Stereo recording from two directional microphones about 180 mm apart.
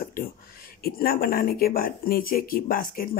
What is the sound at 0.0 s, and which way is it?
Speech, 55° left (ahead or behind).